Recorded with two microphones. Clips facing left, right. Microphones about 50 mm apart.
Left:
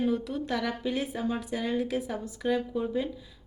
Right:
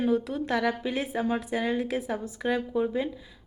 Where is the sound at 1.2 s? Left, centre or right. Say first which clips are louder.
Right 3 dB; right.